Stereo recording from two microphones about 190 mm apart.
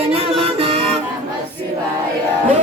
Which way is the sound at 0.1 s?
30° right (ahead or behind).